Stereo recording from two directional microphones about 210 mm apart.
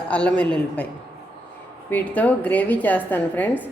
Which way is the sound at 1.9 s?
10° left (ahead or behind).